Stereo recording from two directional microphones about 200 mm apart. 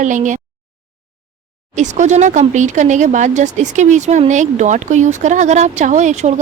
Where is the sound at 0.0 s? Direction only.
40° right (ahead or behind).